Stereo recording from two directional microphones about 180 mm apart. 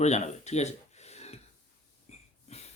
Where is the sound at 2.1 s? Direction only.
35° left (ahead or behind).